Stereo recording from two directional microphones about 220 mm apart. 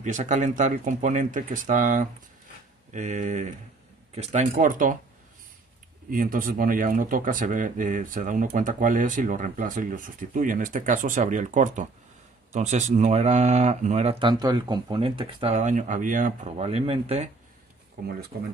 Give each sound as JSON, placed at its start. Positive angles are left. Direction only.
{"t": 0.0, "sound": "speech", "side_deg": -35}
{"t": 6.0, "sound": "speech", "side_deg": -40}
{"t": 14.3, "sound": "speech", "side_deg": -15}
{"t": 18.3, "sound": "speech", "side_deg": -50}